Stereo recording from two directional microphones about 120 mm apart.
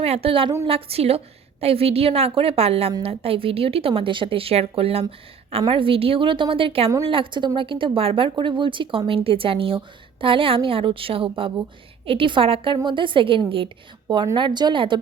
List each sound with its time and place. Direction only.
0.0 s a woman's voice: 55° right (ahead or behind)